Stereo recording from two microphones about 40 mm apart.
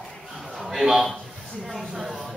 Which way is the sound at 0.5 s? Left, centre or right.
Centre.